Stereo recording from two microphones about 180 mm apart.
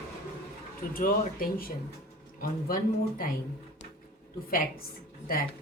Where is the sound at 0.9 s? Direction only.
50° left (ahead or behind).